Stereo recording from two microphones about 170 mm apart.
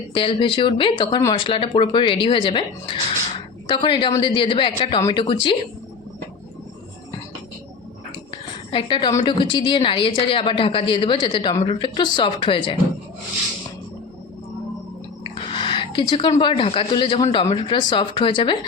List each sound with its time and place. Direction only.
0.1 s speech: 30° left (ahead or behind)
8.7 s speech: 30° left (ahead or behind)
15.4 s a sound: 30° left (ahead or behind)
16.4 s speech: 30° left (ahead or behind)